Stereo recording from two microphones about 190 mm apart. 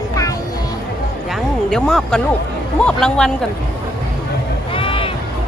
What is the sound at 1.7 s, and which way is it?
Speech, 5° left (ahead or behind).